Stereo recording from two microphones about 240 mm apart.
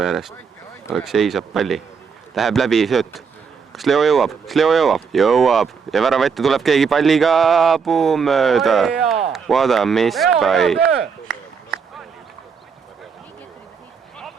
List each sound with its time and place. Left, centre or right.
0.0 s speech: centre